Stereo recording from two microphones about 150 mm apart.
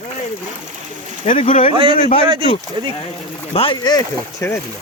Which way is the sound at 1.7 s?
35° right (ahead or behind).